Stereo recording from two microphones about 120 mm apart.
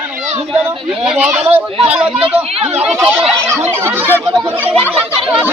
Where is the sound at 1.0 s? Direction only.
10° right (ahead or behind).